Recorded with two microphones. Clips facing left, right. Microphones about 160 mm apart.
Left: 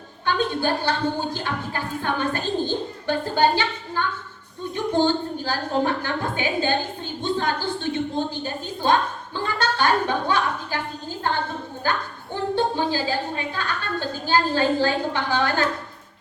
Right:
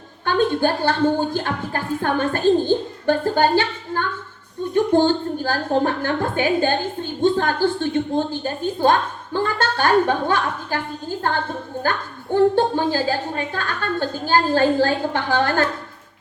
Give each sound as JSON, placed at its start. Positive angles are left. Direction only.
{"t": 0.3, "sound": "a woman's voice", "side_deg": -50}
{"t": 11.8, "sound": "a woman's voice", "side_deg": -45}